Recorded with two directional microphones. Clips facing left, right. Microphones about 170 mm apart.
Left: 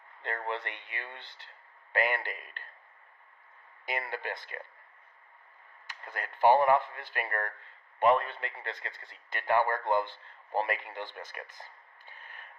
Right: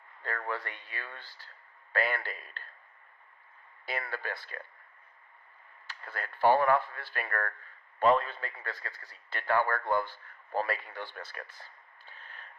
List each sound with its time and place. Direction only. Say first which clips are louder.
0.2 s speech: left 1 dB; 20° left (ahead or behind)
3.8 s speech: left 1 dB; 20° left (ahead or behind)
5.9 s a man's voice: even; 15° left (ahead or behind)
10.9 s a sound: left 1 dB; 20° left (ahead or behind)